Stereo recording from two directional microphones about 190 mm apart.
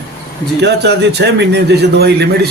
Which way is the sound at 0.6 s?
65° right (ahead or behind).